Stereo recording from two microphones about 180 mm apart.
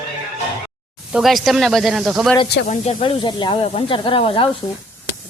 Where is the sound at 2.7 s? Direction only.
40° left (ahead or behind).